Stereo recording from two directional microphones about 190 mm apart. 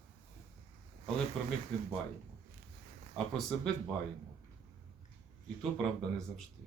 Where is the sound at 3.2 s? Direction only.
5° left (ahead or behind).